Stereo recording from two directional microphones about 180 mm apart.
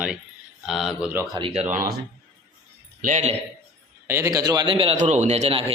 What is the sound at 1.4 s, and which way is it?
Speech, 30° right (ahead or behind).